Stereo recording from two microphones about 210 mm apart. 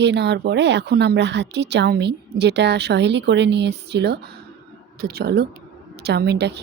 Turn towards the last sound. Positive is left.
turn(degrees=-50)  # may be behind; listen again after turning